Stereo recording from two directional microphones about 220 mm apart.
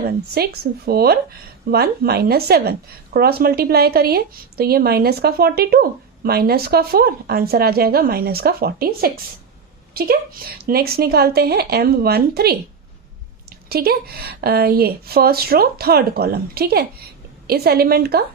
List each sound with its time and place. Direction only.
0.4 s a woman's voice: 45° right (ahead or behind)
13.7 s a woman's voice: 45° right (ahead or behind)